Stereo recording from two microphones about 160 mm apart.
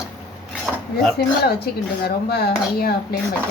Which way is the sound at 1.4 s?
80° left.